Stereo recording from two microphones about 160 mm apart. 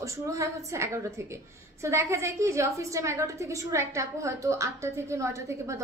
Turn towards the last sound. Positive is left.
turn(degrees=-20)  # may be behind; listen again after turning